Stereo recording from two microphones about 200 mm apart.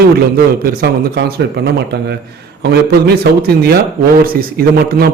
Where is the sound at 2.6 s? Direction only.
55° right (ahead or behind).